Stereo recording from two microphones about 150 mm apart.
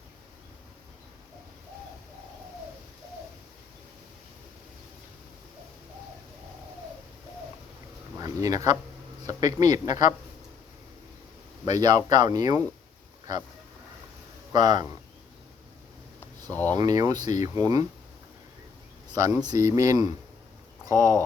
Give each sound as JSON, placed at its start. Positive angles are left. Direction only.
{"t": 8.2, "sound": "speech", "side_deg": -25}
{"t": 11.6, "sound": "speech", "side_deg": -25}
{"t": 14.5, "sound": "speech", "side_deg": -25}
{"t": 16.5, "sound": "speech", "side_deg": 10}
{"t": 16.7, "sound": "speech", "side_deg": -25}
{"t": 19.1, "sound": "speech", "side_deg": -20}